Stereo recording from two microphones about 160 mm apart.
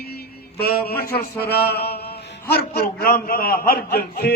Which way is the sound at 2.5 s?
80° left.